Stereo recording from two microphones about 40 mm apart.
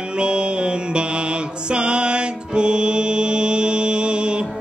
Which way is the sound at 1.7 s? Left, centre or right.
Right.